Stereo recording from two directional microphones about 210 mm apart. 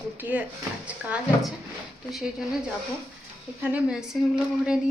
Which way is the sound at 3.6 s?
5° right (ahead or behind).